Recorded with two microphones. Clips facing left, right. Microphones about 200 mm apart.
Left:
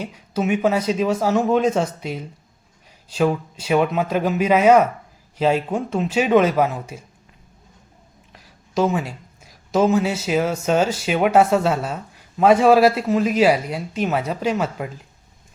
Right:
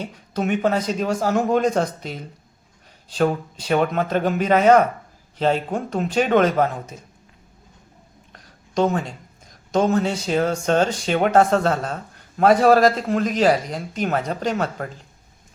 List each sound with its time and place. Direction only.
0.0 s a man's voice: 5° left (ahead or behind)
8.3 s speech: 5° left (ahead or behind)